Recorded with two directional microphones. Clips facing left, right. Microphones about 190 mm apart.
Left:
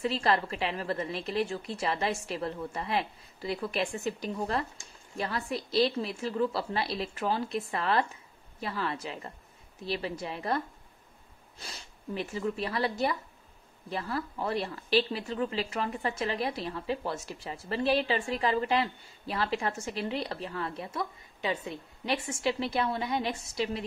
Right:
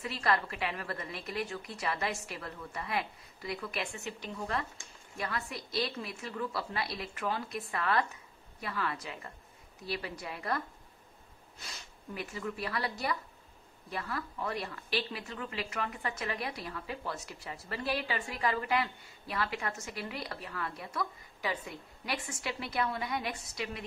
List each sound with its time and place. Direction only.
0.0 s speech: 30° left (ahead or behind)